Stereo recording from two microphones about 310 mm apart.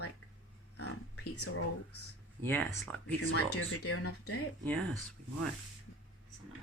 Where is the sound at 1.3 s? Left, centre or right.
Left.